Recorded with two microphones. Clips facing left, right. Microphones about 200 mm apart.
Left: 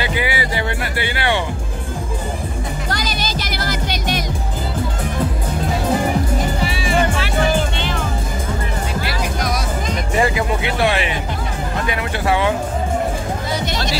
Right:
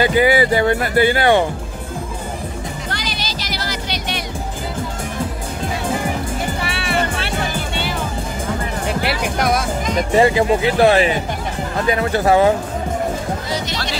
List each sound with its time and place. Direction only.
0.0 s speech: 45° right (ahead or behind)
2.9 s music: 45° left (ahead or behind)
6.6 s music: 65° right (ahead or behind)
9.0 s music: 55° right (ahead or behind)
10.1 s speech: 30° right (ahead or behind)